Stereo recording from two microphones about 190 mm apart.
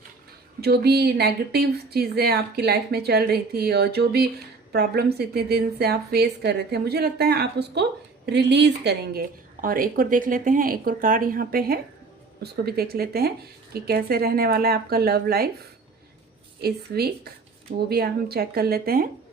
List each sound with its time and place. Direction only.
0.6 s speech: 55° right (ahead or behind)
16.6 s speech: 55° right (ahead or behind)